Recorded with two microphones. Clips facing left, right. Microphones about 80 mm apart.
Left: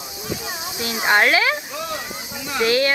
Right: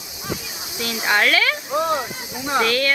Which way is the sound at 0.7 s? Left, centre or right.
Left.